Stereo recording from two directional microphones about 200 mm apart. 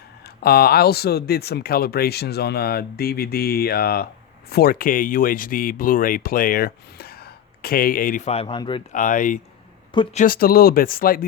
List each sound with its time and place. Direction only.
0.4 s speech: 50° left (ahead or behind); by 8.8 s 25° left (ahead or behind)
8.9 s speech: 40° left (ahead or behind)